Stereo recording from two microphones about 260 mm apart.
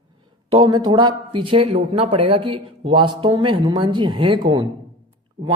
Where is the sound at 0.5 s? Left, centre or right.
Centre.